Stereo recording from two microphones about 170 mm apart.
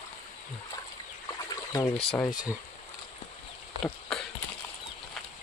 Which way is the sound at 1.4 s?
20° left (ahead or behind).